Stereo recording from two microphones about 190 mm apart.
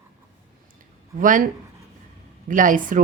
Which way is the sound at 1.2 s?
45° right (ahead or behind).